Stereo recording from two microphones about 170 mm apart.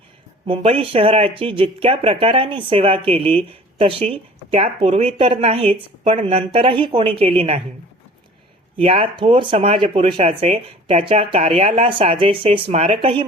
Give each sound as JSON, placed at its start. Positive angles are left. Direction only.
{"t": 0.4, "sound": "speech", "side_deg": -35}
{"t": 8.8, "sound": "speech", "side_deg": -35}